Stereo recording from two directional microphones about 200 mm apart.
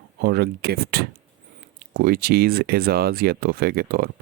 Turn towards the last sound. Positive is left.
turn(degrees=-50)  # may be behind; listen again after turning